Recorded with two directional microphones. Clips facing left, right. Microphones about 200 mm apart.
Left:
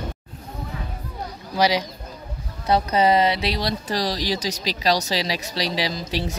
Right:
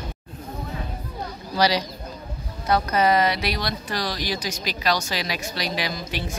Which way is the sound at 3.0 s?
25° left (ahead or behind).